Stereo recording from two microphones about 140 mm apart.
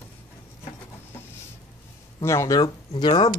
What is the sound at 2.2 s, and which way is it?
Speech, 20° left (ahead or behind).